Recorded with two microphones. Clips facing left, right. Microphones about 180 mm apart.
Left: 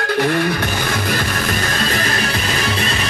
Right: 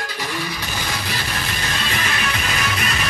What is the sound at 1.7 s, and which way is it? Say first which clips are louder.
Music: left 5 dB; 40° left (ahead or behind).